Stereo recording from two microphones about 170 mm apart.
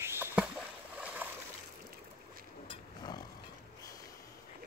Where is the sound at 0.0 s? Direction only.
15° right (ahead or behind).